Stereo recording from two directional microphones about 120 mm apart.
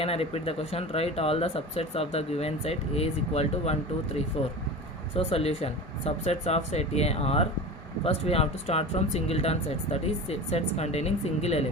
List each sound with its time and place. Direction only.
0.0 s speech: 55° left (ahead or behind)